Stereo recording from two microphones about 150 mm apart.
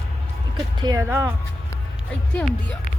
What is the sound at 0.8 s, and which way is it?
Speech, 25° right (ahead or behind).